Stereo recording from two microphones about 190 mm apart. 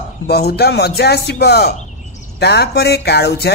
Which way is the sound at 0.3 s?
60° left (ahead or behind).